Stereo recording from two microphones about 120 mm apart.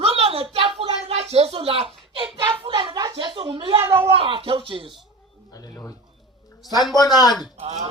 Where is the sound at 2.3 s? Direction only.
40° right (ahead or behind).